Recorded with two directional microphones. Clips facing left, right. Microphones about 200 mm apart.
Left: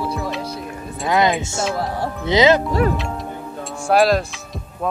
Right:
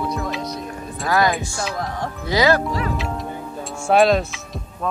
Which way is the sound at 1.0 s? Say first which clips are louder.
Left 2 dB; 20° left (ahead or behind).